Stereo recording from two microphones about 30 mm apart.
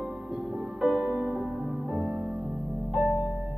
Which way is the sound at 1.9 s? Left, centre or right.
Right.